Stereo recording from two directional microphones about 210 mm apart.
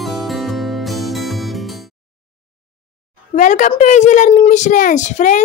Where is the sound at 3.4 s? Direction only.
35° left (ahead or behind).